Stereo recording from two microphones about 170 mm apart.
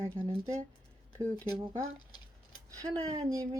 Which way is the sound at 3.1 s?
20° right (ahead or behind).